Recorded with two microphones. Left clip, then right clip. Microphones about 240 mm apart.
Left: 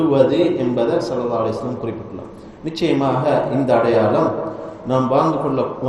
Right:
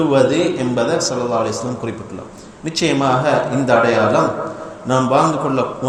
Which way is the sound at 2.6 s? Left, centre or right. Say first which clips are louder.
Right 2 dB; right.